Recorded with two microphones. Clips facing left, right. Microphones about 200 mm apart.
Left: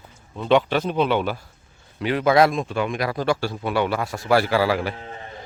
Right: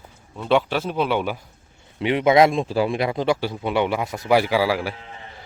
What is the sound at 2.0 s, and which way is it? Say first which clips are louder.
A man's voice: right 2 dB; 25° right (ahead or behind).